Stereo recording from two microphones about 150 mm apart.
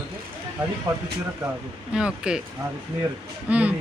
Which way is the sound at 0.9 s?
25° right (ahead or behind).